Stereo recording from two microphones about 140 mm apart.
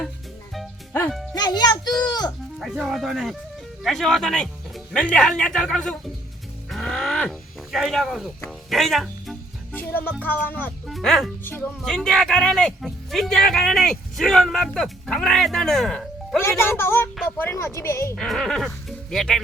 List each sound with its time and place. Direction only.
1.3 s music: 30° left (ahead or behind)
2.0 s sheep: 30° left (ahead or behind)
2.6 s speech: centre (ahead or behind)
6.7 s music: centre (ahead or behind)
9.7 s speech: 15° left (ahead or behind)
10.8 s speech: centre (ahead or behind)
16.4 s speech: 15° left (ahead or behind)
18.2 s speech: centre (ahead or behind)